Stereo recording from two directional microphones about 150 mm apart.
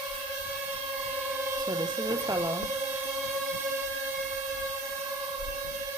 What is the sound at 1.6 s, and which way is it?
Speech, 25° right (ahead or behind).